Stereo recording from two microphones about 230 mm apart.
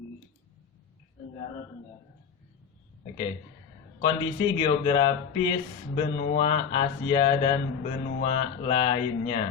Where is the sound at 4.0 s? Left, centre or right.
Centre.